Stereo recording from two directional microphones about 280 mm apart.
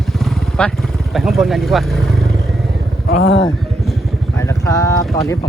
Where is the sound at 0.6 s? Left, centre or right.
Centre.